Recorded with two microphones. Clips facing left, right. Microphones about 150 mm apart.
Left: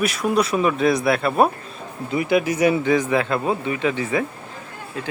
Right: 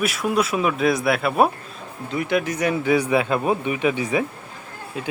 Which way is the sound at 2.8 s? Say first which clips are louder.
Even; 10° right (ahead or behind).